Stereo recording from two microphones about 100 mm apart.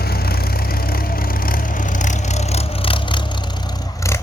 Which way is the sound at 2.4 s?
90° left.